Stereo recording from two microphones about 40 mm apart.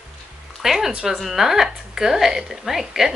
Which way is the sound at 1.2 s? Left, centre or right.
Centre.